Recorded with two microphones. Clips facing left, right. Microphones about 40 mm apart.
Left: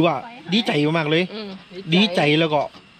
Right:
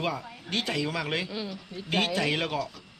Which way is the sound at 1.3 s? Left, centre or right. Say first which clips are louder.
Left 3 dB; left.